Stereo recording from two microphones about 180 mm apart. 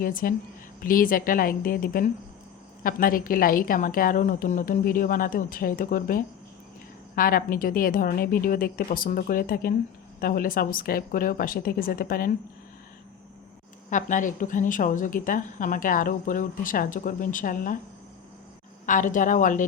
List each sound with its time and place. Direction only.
0.0 s a woman's voice: 50° left (ahead or behind)
13.9 s a woman's voice: 45° left (ahead or behind)
18.9 s a woman's voice: 45° left (ahead or behind)